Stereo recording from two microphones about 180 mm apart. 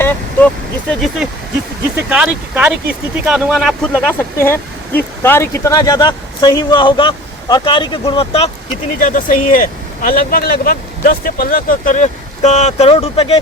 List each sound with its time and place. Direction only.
0.0 s speech: 10° left (ahead or behind); by 8.4 s 30° left (ahead or behind)
9.0 s speech: 50° left (ahead or behind); by 13.4 s 35° left (ahead or behind)